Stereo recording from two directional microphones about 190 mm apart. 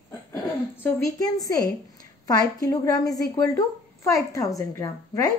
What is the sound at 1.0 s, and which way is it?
A woman's voice, 20° left (ahead or behind).